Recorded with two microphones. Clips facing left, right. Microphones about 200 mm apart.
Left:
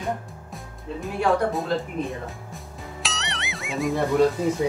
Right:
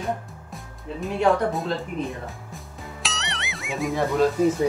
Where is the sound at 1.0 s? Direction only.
Centre (ahead or behind).